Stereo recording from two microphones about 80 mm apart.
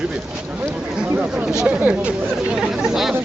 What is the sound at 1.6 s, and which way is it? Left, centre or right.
Speech, centre.